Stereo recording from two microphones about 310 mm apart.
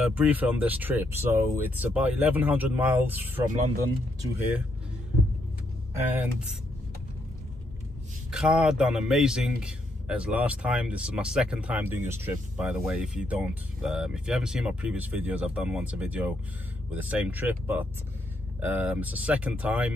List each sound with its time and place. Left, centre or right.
0.0 s a man's voice: centre
8.3 s a man's voice: centre